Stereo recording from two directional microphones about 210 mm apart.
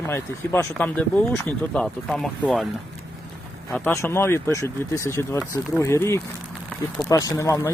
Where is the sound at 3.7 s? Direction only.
10° left (ahead or behind).